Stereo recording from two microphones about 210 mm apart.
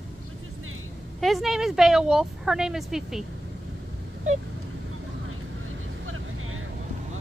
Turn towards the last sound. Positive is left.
turn(degrees=-75)  # may be behind; listen again after turning